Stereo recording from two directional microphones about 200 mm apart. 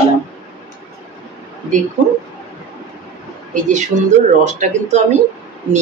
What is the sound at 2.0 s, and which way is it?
Speech, 35° right (ahead or behind).